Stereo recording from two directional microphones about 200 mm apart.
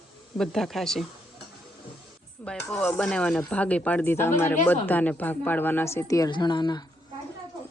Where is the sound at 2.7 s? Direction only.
5° left (ahead or behind); by 6.8 s 20° left (ahead or behind).